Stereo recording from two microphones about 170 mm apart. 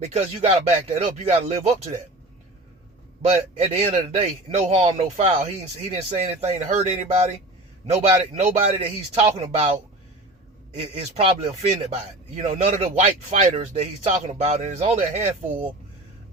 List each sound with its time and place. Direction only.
0.1 s a man's voice: 35° right (ahead or behind)
3.2 s a man's voice: 35° right (ahead or behind)
11.1 s a man's voice: 35° right (ahead or behind)